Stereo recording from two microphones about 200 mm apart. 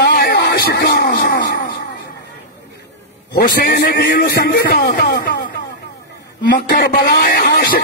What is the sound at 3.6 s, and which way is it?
Speech, 55° left (ahead or behind).